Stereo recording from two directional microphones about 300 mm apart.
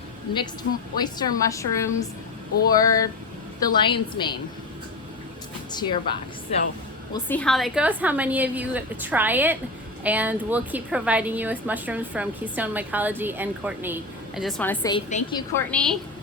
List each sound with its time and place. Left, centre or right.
0.9 s a woman's voice: centre
5.7 s a woman's voice: centre